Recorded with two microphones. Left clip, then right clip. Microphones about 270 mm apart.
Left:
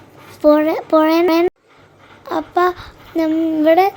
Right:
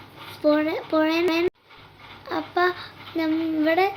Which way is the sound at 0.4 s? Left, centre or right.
Left.